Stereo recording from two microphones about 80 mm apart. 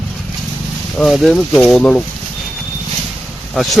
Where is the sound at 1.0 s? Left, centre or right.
Centre.